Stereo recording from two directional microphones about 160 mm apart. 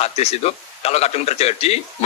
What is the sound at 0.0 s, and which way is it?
A man's voice, 40° left (ahead or behind).